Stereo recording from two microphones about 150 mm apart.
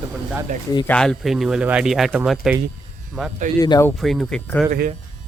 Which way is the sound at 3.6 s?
25° left (ahead or behind).